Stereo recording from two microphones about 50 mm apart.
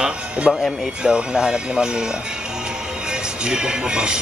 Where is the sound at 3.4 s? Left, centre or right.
Centre.